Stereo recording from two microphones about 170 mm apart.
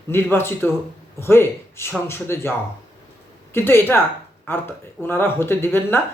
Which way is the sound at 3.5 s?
15° left (ahead or behind).